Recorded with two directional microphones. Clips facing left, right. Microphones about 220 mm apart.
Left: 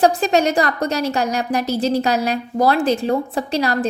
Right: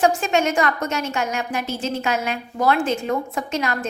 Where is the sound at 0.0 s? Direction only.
35° left (ahead or behind).